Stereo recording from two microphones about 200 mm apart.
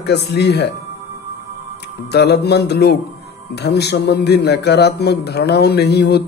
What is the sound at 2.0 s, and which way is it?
A man's voice, 55° left (ahead or behind).